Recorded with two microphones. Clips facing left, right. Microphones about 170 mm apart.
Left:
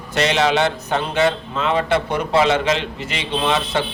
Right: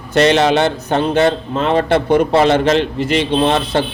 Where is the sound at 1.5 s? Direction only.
45° right (ahead or behind).